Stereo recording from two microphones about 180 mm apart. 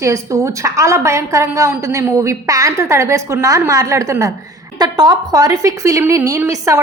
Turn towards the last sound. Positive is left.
turn(degrees=-20)  # may be behind; listen again after turning